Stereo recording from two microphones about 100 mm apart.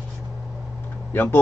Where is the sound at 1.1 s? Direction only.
20° left (ahead or behind).